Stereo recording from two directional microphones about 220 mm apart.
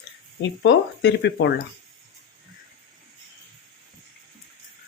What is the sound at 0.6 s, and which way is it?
Speech, 50° left (ahead or behind).